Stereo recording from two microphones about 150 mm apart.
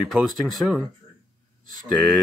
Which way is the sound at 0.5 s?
Centre (ahead or behind).